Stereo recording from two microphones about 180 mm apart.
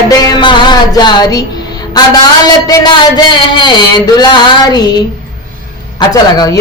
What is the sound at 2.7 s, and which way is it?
Speech, 25° left (ahead or behind).